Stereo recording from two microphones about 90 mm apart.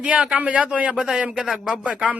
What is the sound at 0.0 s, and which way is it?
A man's voice, 15° right (ahead or behind).